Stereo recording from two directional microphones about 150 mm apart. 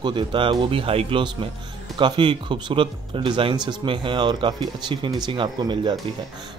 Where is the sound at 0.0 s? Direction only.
35° right (ahead or behind).